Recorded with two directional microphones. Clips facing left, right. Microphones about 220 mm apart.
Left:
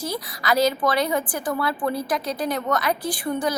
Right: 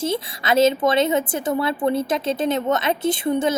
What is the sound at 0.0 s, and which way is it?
A woman's voice, 25° right (ahead or behind).